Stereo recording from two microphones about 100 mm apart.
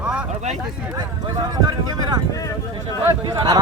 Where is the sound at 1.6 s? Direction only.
40° right (ahead or behind).